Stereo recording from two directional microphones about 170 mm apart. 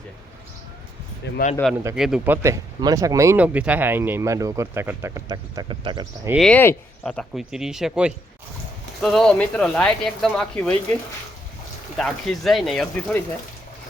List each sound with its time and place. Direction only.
1.2 s speech: 80° left
1.6 s speech: 5° left (ahead or behind); by 6.1 s 30° right (ahead or behind)
6.4 s speech: 10° left (ahead or behind)
11.9 s speech: centre (ahead or behind)